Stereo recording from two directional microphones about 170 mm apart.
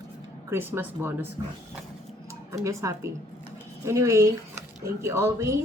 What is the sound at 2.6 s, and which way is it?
Speech, 20° right (ahead or behind).